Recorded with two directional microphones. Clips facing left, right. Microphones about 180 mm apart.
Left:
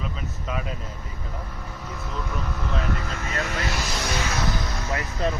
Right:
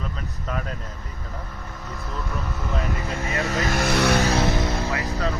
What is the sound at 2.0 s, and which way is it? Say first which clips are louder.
Speech: even; centre (ahead or behind).